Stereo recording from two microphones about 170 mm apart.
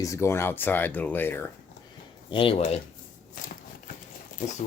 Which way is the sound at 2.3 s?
30° left (ahead or behind).